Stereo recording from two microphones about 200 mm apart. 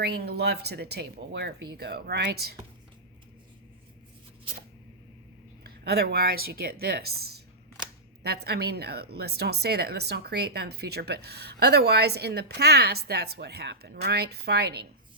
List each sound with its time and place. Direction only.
0.0 s a woman's voice: 55° right (ahead or behind)
5.6 s a woman's voice: 55° right (ahead or behind)